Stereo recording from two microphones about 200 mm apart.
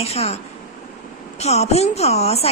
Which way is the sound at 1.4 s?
35° left (ahead or behind).